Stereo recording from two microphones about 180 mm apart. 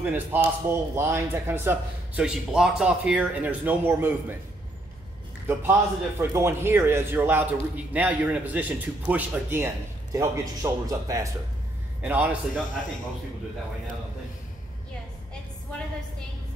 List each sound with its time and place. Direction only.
0.0 s a man's voice: 10° right (ahead or behind)
5.5 s a man's voice: 15° right (ahead or behind)
12.0 s a man's voice: 10° right (ahead or behind)